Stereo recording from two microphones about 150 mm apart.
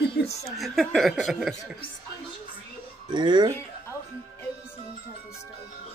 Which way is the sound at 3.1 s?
30° right (ahead or behind).